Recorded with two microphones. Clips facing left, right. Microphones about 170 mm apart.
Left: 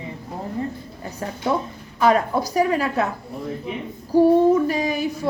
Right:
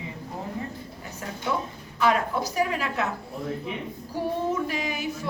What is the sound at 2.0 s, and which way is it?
A woman's voice, 40° left (ahead or behind).